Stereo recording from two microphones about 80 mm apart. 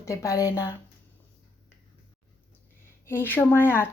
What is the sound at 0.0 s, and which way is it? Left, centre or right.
Speech, left.